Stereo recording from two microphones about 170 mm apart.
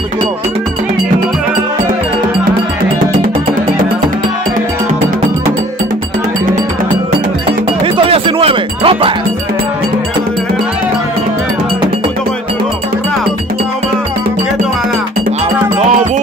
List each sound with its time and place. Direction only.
7.8 s music: 30° right (ahead or behind)